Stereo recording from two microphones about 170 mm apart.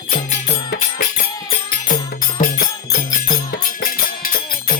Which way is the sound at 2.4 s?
50° left (ahead or behind).